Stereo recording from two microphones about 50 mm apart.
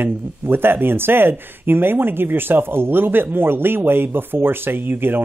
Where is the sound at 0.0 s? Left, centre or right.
Right.